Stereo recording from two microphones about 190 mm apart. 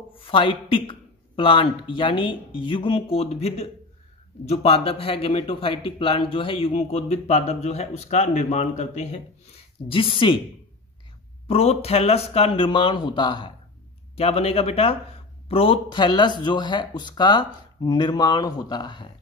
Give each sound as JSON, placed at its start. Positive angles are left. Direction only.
{"t": 0.1, "sound": "a man's voice", "side_deg": 25}
{"t": 11.4, "sound": "a man's voice", "side_deg": 30}